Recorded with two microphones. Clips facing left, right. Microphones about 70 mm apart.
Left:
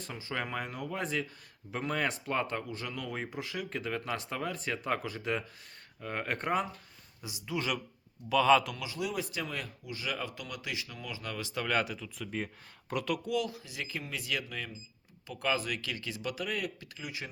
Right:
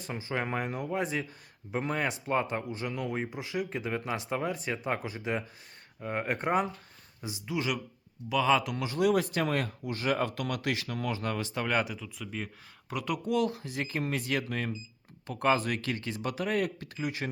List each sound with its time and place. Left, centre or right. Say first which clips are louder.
0.1 s speech: right 4 dB; right
7.2 s speech: right 5 dB; right
7.5 s speech: right 2 dB; centre
8.7 s speech: right 6 dB; right
9.0 s speech: right 10 dB; right; by 11.9 s centre
11.9 s speech: left 1 dB; centre
13.2 s speech: right 4 dB; right